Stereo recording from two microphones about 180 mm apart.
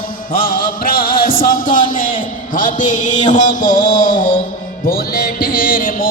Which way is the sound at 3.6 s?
25° left (ahead or behind).